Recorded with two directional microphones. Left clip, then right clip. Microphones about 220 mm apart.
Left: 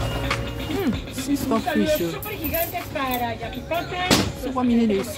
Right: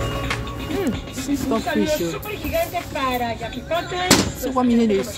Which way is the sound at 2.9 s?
50° right (ahead or behind).